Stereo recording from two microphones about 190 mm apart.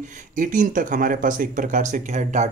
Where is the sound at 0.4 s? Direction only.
45° right (ahead or behind).